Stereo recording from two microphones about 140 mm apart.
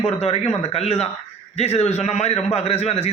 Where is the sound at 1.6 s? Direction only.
50° left (ahead or behind).